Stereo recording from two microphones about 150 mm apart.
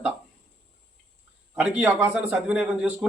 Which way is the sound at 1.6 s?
10° right (ahead or behind).